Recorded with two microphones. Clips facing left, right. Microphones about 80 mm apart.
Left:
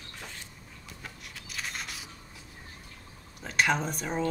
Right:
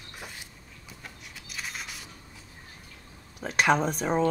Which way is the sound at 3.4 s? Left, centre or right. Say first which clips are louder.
Right 3 dB; right.